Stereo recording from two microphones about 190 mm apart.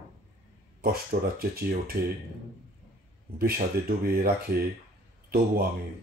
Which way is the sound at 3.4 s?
50° right (ahead or behind).